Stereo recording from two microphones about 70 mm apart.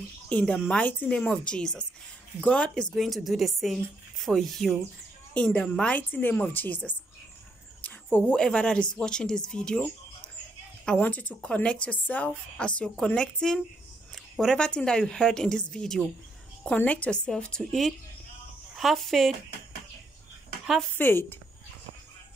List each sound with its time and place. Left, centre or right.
0.3 s speech: centre
2.9 s speech: centre
5.3 s a woman's voice: centre
7.8 s a sound: left
8.5 s speech: centre
11.0 s speech: left
16.7 s speech: left; by 19.3 s centre
20.9 s a woman's voice: left